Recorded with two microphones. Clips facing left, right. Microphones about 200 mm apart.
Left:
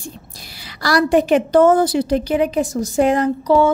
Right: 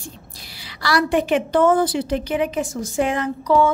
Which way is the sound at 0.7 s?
40° left (ahead or behind).